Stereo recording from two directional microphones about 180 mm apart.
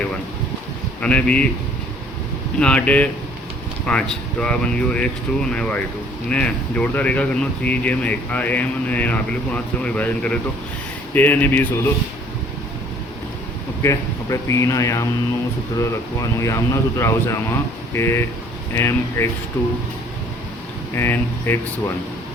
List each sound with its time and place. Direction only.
1.0 s speech: 5° left (ahead or behind)
2.6 s speech: 5° left (ahead or behind)
13.8 s speech: 15° left (ahead or behind)
20.9 s speech: 15° left (ahead or behind)